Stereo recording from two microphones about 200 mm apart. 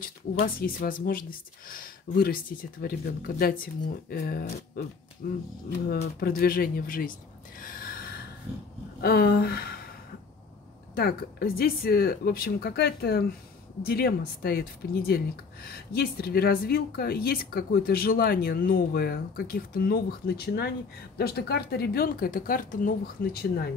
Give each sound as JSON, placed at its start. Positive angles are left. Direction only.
{"t": 0.6, "sound": "speech", "side_deg": 45}
{"t": 11.0, "sound": "speech", "side_deg": 50}